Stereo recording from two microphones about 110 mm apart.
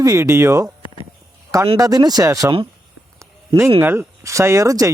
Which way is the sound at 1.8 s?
35° right (ahead or behind).